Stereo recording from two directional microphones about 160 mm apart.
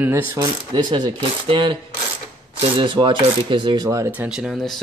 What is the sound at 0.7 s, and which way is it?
Speech, 25° right (ahead or behind).